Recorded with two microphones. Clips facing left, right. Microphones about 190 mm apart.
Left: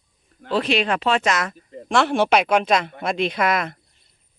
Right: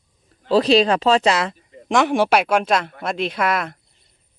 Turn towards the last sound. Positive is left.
turn(degrees=-5)  # may be behind; listen again after turning